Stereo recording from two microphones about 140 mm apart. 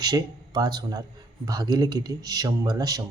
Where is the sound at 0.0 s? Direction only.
30° right (ahead or behind).